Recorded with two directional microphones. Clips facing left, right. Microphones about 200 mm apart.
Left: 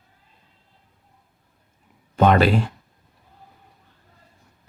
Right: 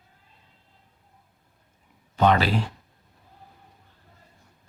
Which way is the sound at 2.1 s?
50° left (ahead or behind).